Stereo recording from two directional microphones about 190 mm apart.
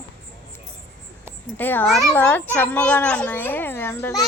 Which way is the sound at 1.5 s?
10° left (ahead or behind).